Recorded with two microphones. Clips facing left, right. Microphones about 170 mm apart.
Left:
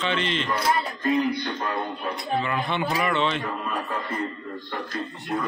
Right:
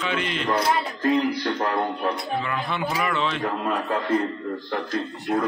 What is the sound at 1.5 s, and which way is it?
Speech, 60° right (ahead or behind).